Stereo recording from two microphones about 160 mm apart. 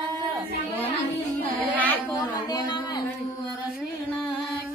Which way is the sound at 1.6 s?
10° left (ahead or behind).